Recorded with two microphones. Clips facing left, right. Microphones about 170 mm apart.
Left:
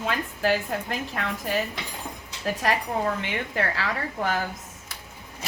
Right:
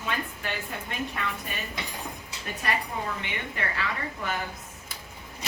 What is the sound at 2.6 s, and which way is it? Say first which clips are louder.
A woman's voice: left 5 dB; 90° left.